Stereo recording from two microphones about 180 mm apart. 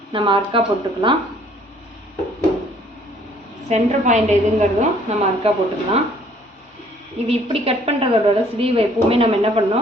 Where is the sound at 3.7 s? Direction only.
40° right (ahead or behind).